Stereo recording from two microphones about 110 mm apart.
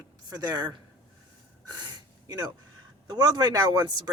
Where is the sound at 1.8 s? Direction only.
35° right (ahead or behind).